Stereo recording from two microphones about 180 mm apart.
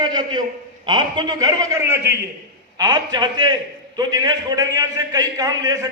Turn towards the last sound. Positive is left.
turn(degrees=-20)  # may be behind; listen again after turning